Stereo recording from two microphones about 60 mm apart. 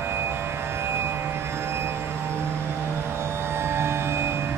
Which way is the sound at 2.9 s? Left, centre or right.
Right.